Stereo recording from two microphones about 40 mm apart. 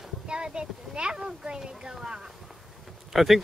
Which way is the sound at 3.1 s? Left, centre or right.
Centre.